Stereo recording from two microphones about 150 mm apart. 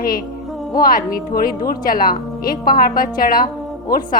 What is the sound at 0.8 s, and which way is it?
A woman's voice, 70° left (ahead or behind).